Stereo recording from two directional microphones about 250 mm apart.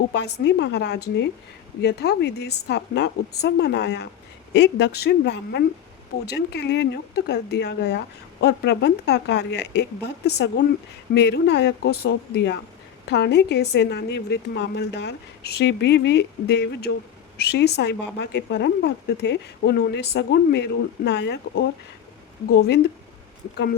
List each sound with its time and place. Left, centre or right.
0.1 s a woman's voice: left